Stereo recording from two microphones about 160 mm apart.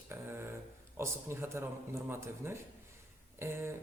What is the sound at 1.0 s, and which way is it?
A woman's voice, 15° right (ahead or behind).